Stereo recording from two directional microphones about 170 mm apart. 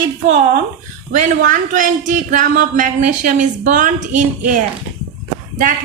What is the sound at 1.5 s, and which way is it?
A woman's voice, 50° right (ahead or behind).